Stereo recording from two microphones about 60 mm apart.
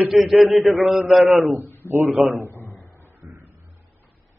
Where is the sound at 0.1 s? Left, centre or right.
Centre.